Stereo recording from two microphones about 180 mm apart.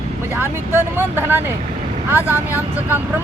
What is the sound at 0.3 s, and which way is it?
Speech, 15° right (ahead or behind).